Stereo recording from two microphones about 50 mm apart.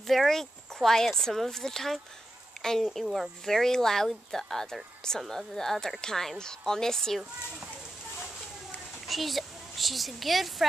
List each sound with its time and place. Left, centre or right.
0.0 s speech: centre
9.0 s a child's voice: centre